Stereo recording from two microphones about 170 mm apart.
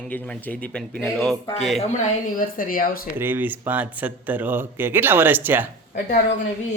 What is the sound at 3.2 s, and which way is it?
Speech, 10° right (ahead or behind).